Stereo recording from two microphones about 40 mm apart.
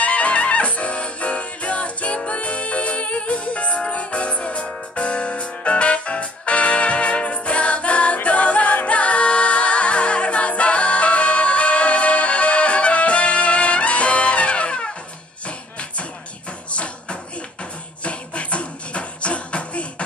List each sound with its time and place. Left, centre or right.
0.0 s music: left
16.7 s a sound: left
18.0 s beatboxing: left